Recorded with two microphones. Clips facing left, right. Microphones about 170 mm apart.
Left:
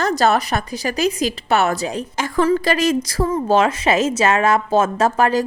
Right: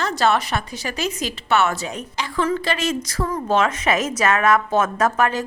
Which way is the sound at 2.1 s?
45° left (ahead or behind).